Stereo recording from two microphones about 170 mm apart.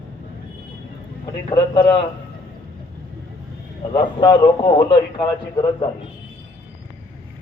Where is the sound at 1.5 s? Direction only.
30° left (ahead or behind).